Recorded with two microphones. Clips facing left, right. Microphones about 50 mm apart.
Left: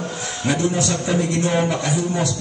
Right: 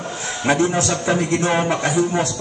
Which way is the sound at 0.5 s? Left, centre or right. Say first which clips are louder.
Right 3 dB; right.